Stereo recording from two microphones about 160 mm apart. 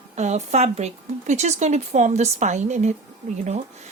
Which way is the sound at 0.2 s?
45° right (ahead or behind).